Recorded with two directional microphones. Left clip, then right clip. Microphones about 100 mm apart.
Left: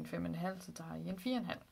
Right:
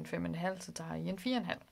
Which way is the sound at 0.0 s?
50° right (ahead or behind).